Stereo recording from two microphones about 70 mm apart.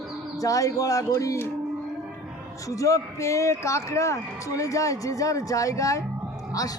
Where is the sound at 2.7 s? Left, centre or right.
Left.